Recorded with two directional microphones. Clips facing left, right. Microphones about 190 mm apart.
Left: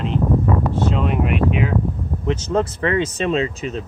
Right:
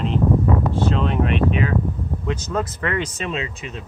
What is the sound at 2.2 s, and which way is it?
Speech, 25° left (ahead or behind).